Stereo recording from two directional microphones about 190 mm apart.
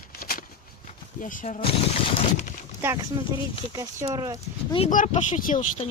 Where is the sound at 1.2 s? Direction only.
45° left (ahead or behind).